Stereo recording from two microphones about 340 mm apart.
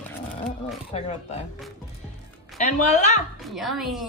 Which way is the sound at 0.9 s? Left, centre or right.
Centre.